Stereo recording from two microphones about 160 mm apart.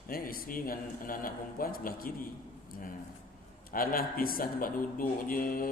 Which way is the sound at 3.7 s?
65° left (ahead or behind).